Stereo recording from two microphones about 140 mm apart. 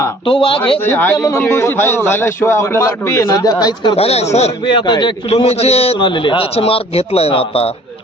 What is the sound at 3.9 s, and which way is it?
Speech, 45° left (ahead or behind).